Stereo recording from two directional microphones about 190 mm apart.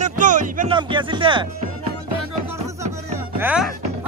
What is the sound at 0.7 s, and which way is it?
Speech, 25° right (ahead or behind).